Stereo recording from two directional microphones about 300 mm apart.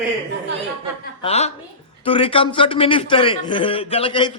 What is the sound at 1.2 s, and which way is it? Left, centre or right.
A woman's voice, left.